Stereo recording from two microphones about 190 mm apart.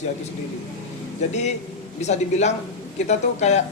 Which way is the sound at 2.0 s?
35° left (ahead or behind).